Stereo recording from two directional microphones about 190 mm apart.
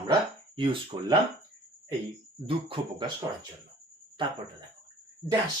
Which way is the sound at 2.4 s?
30° right (ahead or behind).